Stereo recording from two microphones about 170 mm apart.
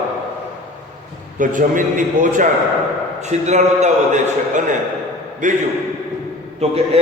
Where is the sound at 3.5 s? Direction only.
45° right (ahead or behind).